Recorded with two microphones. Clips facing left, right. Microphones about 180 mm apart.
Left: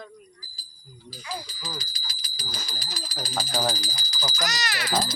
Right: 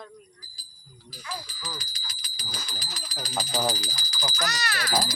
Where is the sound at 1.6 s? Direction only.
35° left (ahead or behind).